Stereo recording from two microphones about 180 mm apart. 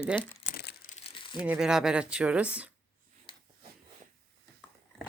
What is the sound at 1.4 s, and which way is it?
Speech, 5° right (ahead or behind).